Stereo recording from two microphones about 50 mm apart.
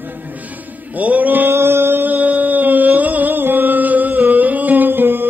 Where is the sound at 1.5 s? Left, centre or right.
Right.